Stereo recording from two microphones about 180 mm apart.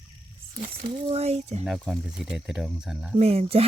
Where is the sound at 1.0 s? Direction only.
35° right (ahead or behind).